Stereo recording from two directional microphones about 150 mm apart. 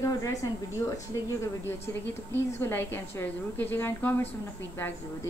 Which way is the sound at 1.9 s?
20° left (ahead or behind).